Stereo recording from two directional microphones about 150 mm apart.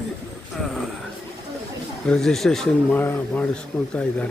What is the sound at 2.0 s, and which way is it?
Speech, 5° left (ahead or behind).